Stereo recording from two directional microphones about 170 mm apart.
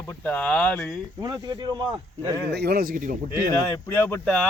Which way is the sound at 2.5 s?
70° right (ahead or behind).